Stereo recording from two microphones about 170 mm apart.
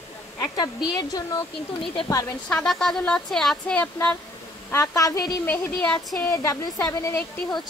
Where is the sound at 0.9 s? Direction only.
20° left (ahead or behind).